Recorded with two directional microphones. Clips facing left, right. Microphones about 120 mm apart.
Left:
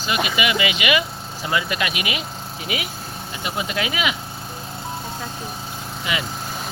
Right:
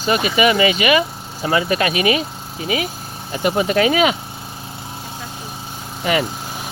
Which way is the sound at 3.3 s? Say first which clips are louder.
Right 10 dB; 50° right (ahead or behind).